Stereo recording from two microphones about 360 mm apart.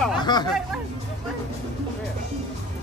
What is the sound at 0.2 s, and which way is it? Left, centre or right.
Music, centre.